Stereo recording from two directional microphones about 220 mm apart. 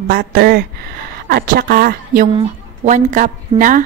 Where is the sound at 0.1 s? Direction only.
45° right (ahead or behind).